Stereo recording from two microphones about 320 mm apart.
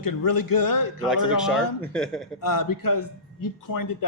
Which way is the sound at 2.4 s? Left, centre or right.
Left.